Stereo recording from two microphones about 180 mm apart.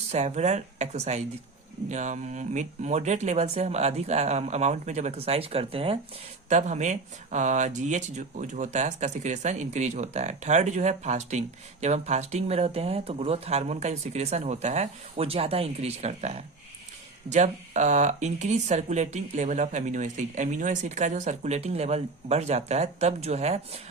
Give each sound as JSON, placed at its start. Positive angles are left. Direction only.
{"t": 0.1, "sound": "speech", "side_deg": -40}